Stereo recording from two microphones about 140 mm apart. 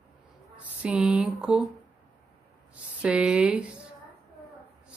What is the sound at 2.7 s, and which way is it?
Speech, 10° right (ahead or behind).